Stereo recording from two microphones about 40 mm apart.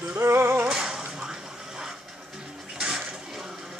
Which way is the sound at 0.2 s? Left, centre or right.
Right.